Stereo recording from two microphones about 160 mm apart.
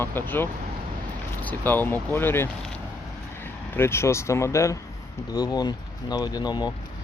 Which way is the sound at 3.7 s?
15° left (ahead or behind).